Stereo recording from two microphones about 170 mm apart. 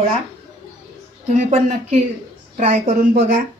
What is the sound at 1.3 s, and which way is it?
A woman's voice, 45° right (ahead or behind).